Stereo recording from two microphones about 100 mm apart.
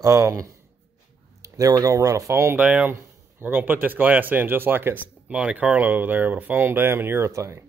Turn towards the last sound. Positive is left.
turn(degrees=-30)  # may be behind; listen again after turning